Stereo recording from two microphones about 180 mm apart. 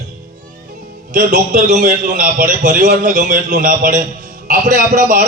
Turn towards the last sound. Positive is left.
turn(degrees=-50)  # may be behind; listen again after turning